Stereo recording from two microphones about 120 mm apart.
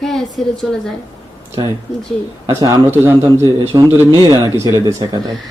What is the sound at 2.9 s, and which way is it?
A man's voice, 20° right (ahead or behind).